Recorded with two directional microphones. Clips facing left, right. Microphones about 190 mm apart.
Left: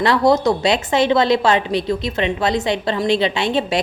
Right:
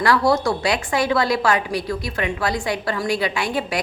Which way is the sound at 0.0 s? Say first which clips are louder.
Left 3 dB; 20° left (ahead or behind).